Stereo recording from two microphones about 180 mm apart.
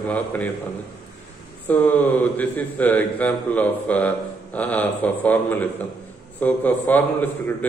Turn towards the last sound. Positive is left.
turn(degrees=10)  # may be behind; listen again after turning